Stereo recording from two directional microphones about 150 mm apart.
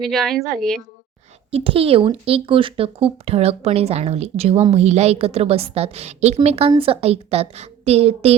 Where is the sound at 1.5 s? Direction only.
40° right (ahead or behind).